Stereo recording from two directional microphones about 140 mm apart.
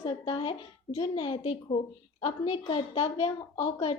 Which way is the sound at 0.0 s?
40° left (ahead or behind).